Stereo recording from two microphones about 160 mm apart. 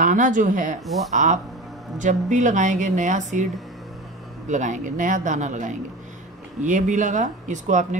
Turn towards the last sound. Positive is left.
turn(degrees=-50)  # may be behind; listen again after turning